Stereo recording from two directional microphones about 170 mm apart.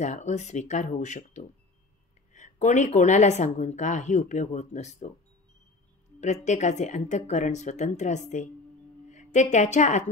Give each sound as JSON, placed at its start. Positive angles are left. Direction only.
{"t": 0.0, "sound": "speech", "side_deg": 45}
{"t": 6.2, "sound": "a woman's voice", "side_deg": 45}